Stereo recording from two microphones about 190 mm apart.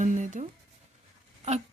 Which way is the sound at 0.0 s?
40° right (ahead or behind).